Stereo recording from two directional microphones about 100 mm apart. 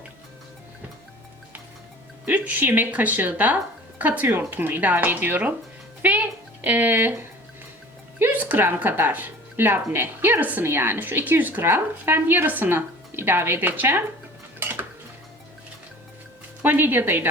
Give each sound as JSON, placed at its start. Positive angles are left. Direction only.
{"t": 2.2, "sound": "speech", "side_deg": -15}
{"t": 6.0, "sound": "a sound", "side_deg": -15}
{"t": 8.2, "sound": "a woman's voice", "side_deg": -15}
{"t": 14.6, "sound": "cutlery", "side_deg": -20}
{"t": 16.6, "sound": "a woman's voice", "side_deg": -20}